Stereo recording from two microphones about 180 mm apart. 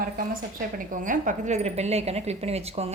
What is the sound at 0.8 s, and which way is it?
A woman's voice, 50° right (ahead or behind).